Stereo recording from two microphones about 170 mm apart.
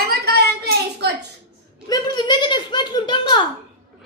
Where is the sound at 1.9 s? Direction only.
25° left (ahead or behind).